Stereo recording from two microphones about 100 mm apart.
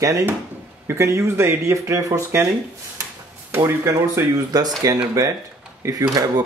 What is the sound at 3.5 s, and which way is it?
Speech, 25° right (ahead or behind).